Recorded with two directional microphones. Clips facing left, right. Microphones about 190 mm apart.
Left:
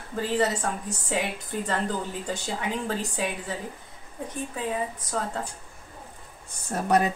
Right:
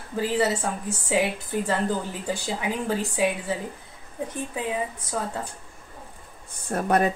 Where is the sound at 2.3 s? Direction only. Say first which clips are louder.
Right 4 dB; 10° right (ahead or behind).